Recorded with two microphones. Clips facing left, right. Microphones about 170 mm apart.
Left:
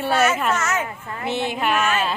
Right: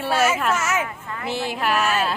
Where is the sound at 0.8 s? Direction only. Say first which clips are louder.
Even; 30° left (ahead or behind).